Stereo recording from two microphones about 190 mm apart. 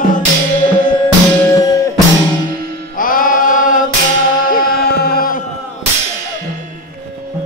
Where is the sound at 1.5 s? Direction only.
15° left (ahead or behind).